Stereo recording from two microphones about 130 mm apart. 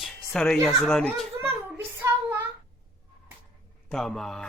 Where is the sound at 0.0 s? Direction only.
Centre (ahead or behind).